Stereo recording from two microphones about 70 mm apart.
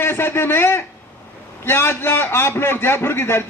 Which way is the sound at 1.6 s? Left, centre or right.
Left.